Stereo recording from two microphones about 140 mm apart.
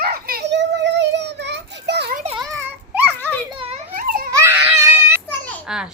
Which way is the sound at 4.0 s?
90° right.